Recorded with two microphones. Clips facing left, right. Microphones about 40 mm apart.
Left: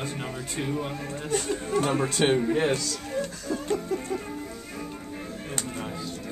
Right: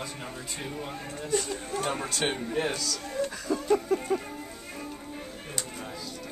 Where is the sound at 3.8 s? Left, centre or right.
Centre.